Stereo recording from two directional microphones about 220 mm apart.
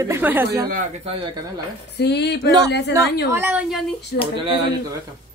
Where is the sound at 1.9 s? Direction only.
50° left (ahead or behind).